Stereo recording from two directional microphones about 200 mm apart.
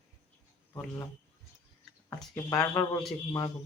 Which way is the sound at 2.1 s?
Centre (ahead or behind).